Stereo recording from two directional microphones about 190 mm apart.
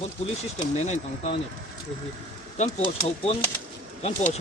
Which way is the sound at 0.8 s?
40° left (ahead or behind).